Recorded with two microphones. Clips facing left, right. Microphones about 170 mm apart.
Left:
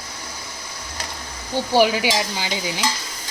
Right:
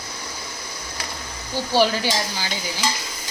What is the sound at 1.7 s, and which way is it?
Speech, 15° left (ahead or behind).